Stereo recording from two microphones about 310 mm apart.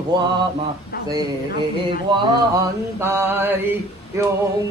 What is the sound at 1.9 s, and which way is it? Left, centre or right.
Mantra, centre.